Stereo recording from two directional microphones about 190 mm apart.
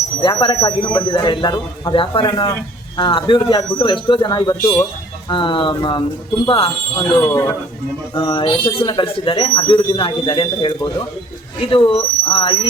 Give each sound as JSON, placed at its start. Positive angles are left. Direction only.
{"t": 0.2, "sound": "speech", "side_deg": 25}